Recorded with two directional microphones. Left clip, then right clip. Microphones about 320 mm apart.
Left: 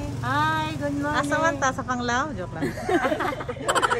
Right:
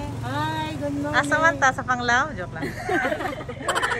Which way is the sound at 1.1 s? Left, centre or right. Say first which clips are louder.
Right 5 dB; centre.